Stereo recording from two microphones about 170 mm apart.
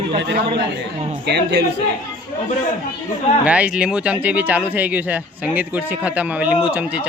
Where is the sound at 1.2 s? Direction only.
80° right.